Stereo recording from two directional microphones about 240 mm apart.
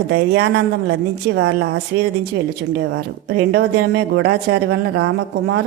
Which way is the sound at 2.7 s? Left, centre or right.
Right.